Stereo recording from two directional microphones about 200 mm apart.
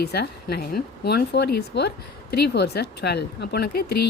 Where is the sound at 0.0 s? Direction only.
55° left (ahead or behind).